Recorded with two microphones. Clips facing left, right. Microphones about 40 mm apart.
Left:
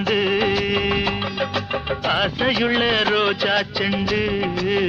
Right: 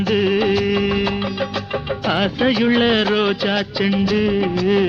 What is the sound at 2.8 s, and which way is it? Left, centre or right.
Music, centre.